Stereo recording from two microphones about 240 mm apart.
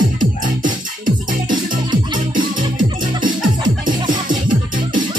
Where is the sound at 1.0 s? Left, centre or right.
Right.